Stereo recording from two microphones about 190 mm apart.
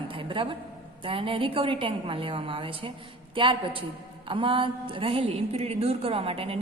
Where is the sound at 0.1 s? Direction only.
30° right (ahead or behind).